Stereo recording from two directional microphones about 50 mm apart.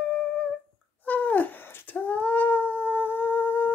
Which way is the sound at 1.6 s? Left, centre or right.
Left.